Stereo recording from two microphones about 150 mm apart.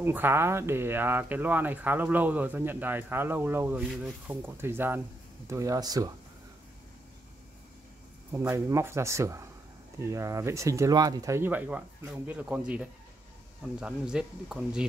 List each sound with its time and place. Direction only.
0.0 s speech: 15° right (ahead or behind)
8.3 s speech: 15° right (ahead or behind)